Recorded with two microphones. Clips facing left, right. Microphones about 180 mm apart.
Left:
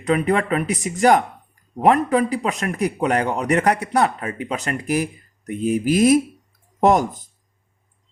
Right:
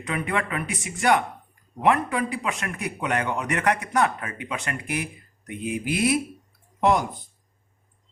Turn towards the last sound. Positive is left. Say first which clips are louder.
# left 5 dB
turn(degrees=45)  # may be behind; listen again after turning